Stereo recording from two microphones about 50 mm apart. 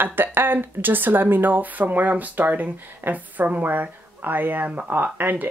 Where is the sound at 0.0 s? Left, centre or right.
Right.